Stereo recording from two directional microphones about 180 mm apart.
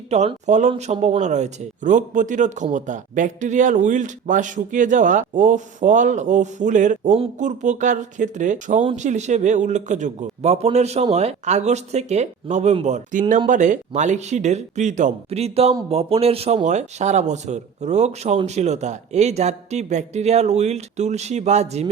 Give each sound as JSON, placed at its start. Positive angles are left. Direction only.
{"t": 0.1, "sound": "a man's voice", "side_deg": -40}